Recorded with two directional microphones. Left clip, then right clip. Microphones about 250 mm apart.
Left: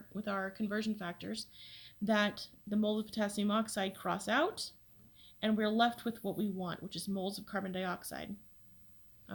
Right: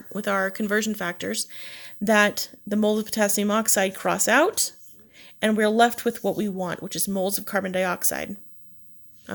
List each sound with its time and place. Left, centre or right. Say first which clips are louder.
0.1 s speech: right 14 dB; right